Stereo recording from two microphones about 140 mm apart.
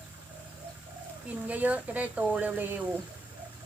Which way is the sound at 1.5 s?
10° right (ahead or behind).